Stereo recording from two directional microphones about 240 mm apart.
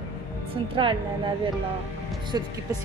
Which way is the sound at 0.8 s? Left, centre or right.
Right.